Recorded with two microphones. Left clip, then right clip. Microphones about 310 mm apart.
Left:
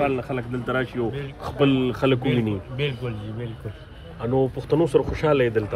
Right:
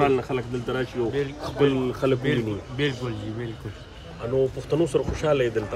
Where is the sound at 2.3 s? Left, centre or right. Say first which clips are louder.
Left 1 dB; centre.